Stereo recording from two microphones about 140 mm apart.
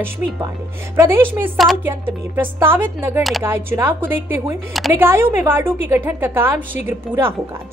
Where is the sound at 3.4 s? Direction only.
15° right (ahead or behind).